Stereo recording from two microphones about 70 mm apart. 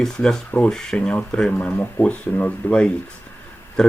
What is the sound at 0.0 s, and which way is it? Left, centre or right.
Speech, centre.